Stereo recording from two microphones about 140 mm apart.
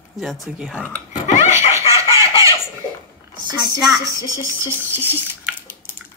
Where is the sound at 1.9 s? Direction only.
25° right (ahead or behind).